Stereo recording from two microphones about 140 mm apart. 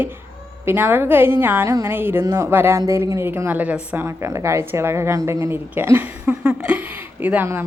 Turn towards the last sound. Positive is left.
turn(degrees=-15)  # may be behind; listen again after turning